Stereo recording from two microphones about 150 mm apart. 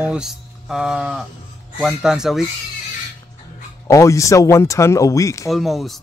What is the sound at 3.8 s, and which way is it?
Speech, 20° left (ahead or behind).